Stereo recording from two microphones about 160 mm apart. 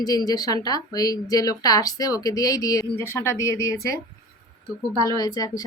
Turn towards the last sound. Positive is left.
turn(degrees=25)  # may be behind; listen again after turning